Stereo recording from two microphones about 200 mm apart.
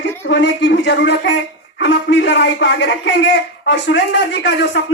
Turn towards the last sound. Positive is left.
turn(degrees=65)  # may be behind; listen again after turning